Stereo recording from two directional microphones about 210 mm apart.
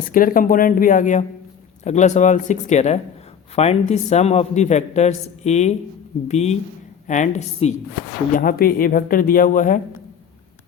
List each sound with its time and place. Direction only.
0.0 s a man's voice: 40° left (ahead or behind)